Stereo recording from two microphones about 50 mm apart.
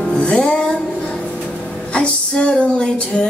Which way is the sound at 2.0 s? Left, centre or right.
Centre.